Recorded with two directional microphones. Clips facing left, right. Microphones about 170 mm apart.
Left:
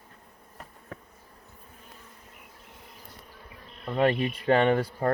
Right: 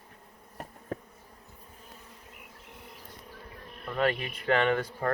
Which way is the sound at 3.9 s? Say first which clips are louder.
Left 4 dB; 30° left (ahead or behind).